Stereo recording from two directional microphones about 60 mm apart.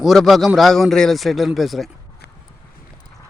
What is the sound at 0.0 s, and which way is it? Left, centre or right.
Speech, centre.